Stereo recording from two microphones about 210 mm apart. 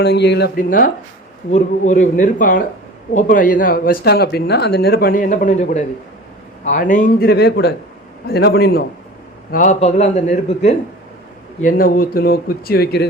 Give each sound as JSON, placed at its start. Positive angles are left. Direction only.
{"t": 0.0, "sound": "a man's voice", "side_deg": 55}